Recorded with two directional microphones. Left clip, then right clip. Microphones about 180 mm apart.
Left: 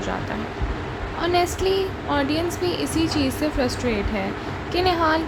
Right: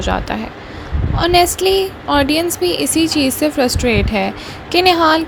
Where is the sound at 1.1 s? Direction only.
40° right (ahead or behind).